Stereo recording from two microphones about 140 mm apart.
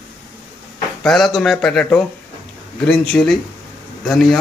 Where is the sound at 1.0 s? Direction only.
Centre (ahead or behind).